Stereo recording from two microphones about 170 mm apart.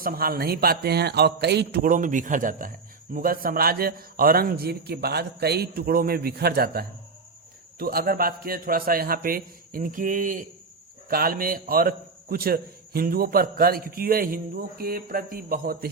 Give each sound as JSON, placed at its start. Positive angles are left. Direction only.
{"t": 0.0, "sound": "speech", "side_deg": -60}